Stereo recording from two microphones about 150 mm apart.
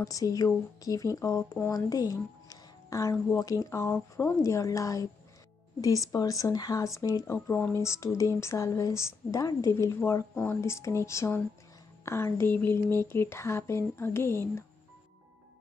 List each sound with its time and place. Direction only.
0.0 s speech: 25° left (ahead or behind)